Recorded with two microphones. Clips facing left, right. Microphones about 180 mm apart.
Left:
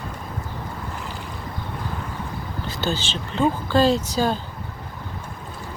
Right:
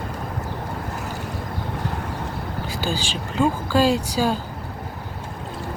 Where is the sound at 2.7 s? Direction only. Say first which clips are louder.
Left 1 dB; 10° right (ahead or behind).